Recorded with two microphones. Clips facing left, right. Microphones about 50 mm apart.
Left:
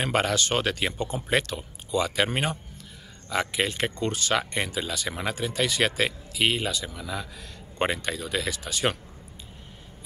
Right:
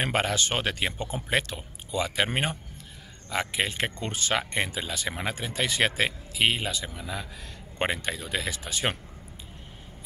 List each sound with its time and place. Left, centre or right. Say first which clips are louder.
0.0 s speech: left 2 dB; centre